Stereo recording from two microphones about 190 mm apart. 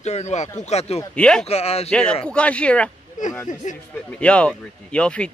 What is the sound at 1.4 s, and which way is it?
Speech, 35° left (ahead or behind).